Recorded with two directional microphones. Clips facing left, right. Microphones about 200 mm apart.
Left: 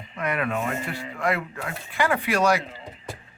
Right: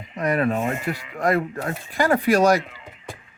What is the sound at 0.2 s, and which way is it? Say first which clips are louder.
Speech: right 5 dB; 35° right (ahead or behind).